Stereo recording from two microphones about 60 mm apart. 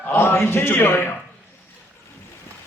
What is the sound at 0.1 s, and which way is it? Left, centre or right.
Speech, left.